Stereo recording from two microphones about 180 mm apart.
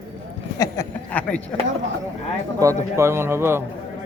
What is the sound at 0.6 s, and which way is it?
Speech, 10° left (ahead or behind).